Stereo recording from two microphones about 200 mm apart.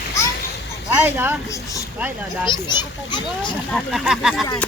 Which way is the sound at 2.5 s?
20° left (ahead or behind).